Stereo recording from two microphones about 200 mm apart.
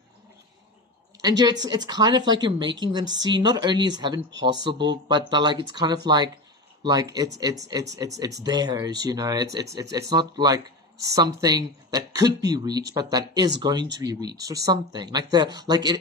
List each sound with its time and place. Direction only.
1.4 s speech: 20° right (ahead or behind)